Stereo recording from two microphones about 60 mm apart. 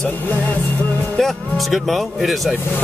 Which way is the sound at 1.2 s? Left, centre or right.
Centre.